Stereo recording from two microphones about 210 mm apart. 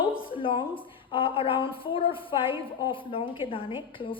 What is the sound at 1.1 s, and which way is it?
A woman's voice, 25° left (ahead or behind).